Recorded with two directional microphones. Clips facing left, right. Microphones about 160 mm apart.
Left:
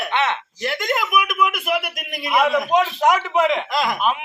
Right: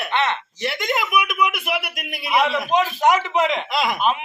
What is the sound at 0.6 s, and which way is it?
A man's voice, centre (ahead or behind).